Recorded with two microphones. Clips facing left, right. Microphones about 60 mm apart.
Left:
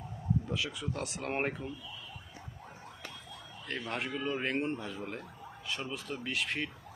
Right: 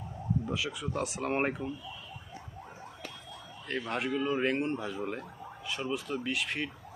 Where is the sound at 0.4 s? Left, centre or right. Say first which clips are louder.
Right 2 dB; centre.